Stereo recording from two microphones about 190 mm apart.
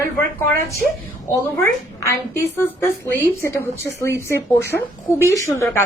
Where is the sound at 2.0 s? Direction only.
15° left (ahead or behind).